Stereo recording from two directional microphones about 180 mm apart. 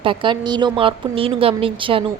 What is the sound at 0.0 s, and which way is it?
A woman's voice, 30° right (ahead or behind).